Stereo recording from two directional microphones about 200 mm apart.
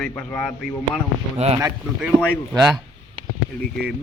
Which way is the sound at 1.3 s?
30° right (ahead or behind).